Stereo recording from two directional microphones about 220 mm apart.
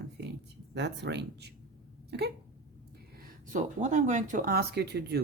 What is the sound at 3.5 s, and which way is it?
Speech, 35° right (ahead or behind).